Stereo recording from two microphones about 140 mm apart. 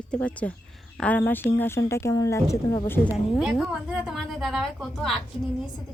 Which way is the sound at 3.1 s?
Centre (ahead or behind).